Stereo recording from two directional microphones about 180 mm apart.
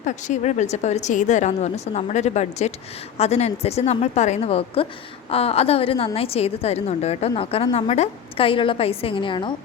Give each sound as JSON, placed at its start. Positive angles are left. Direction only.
{"t": 0.0, "sound": "a woman's voice", "side_deg": 40}